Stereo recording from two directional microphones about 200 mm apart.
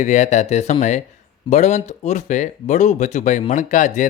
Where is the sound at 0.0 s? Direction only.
35° left (ahead or behind).